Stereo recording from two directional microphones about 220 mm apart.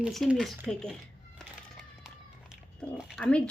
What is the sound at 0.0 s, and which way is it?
Speech, centre (ahead or behind).